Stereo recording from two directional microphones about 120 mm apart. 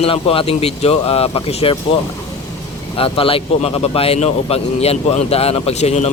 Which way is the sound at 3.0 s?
50° left (ahead or behind).